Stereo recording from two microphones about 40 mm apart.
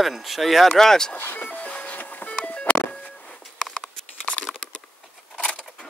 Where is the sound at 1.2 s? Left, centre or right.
Left.